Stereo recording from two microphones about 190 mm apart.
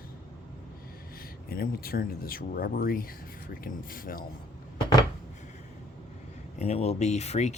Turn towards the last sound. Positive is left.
turn(degrees=35)  # may be behind; listen again after turning